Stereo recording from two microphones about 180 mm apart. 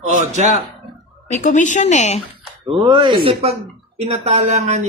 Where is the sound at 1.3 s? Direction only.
45° left (ahead or behind).